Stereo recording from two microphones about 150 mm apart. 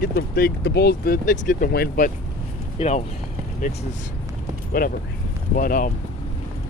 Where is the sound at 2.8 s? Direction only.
45° left (ahead or behind).